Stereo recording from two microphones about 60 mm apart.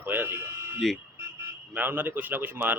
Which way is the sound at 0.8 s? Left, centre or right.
Centre.